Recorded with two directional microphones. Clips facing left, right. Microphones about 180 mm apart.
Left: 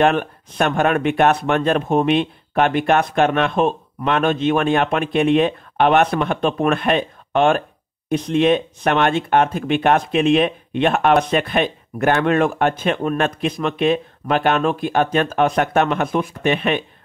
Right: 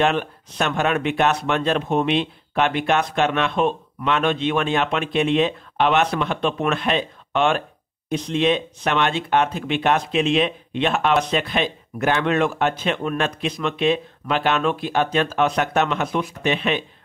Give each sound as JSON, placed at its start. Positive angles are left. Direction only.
{"t": 0.0, "sound": "speech", "side_deg": 50}